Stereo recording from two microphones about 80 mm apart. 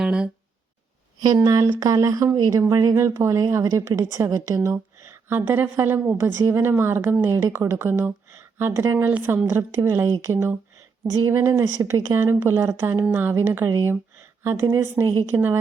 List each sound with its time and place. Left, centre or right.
0.0 s speech: centre
1.4 s a woman's voice: right
2.3 s speech: right
2.6 s a woman's voice: right
4.7 s a woman's voice: right
9.0 s a woman's voice: right